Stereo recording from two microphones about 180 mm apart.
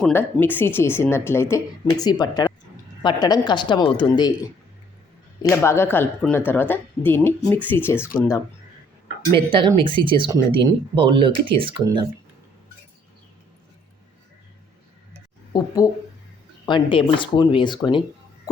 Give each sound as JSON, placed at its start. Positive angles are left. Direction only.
{"t": 0.0, "sound": "speech", "side_deg": 10}
{"t": 5.4, "sound": "speech", "side_deg": 15}
{"t": 9.3, "sound": "speech", "side_deg": -30}
{"t": 15.5, "sound": "speech", "side_deg": 20}